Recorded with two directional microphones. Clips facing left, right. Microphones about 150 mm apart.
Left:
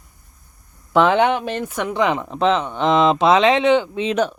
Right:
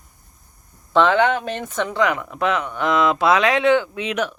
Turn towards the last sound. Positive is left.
turn(degrees=30)  # may be behind; listen again after turning